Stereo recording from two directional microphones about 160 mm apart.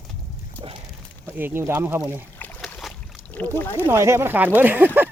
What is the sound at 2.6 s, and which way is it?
Boat, 5° left (ahead or behind).